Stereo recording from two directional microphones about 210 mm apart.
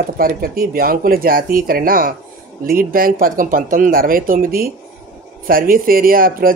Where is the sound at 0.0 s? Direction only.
45° right (ahead or behind).